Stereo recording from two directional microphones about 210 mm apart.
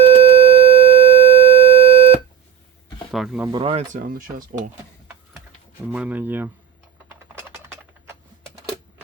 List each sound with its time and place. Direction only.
0.0 s siren: 25° right (ahead or behind)
3.1 s speech: centre (ahead or behind)
3.5 s speech: 25° right (ahead or behind)
3.9 s speech: 40° right (ahead or behind)
5.9 s speech: 5° right (ahead or behind)